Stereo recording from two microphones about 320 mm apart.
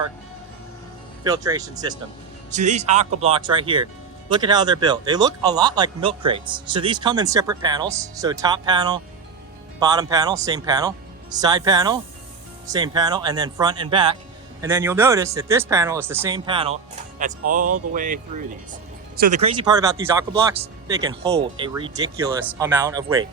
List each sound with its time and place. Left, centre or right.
1.2 s speech: centre
2.5 s speech: right